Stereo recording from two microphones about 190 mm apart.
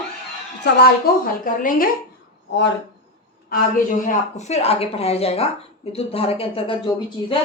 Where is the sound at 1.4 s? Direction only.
45° left (ahead or behind).